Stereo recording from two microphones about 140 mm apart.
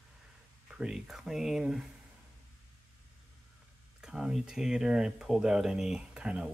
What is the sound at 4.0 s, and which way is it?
Speech, 5° right (ahead or behind).